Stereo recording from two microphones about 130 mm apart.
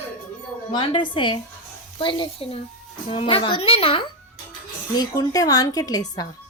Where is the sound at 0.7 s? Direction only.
40° left (ahead or behind).